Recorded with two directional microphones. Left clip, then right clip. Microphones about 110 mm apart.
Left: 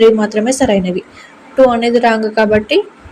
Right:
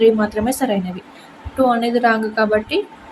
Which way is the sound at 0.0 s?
30° left (ahead or behind).